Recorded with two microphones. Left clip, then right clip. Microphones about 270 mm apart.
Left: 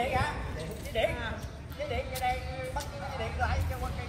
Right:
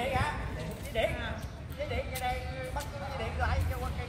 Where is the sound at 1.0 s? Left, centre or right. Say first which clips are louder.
Left 1 dB; centre.